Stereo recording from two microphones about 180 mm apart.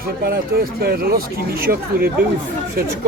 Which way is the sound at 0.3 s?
55° right (ahead or behind).